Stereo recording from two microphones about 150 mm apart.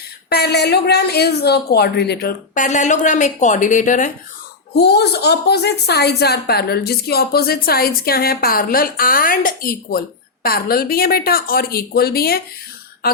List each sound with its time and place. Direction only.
0.3 s a woman's voice: 90° left
2.6 s a woman's voice: 55° left (ahead or behind)
4.7 s a woman's voice: 90° left